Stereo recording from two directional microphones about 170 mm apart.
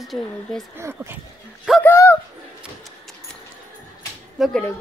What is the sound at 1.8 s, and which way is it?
Speech, 10° left (ahead or behind).